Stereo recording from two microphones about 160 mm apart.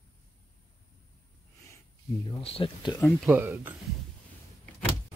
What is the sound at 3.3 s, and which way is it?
Speech, 15° right (ahead or behind).